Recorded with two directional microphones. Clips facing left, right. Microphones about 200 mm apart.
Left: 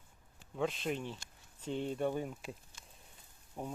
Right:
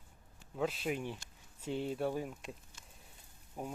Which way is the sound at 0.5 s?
5° right (ahead or behind).